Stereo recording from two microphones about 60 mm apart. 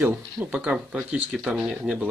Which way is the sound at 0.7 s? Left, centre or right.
Centre.